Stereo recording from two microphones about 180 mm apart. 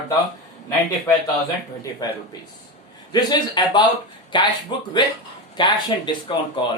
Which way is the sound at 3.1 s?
25° left (ahead or behind).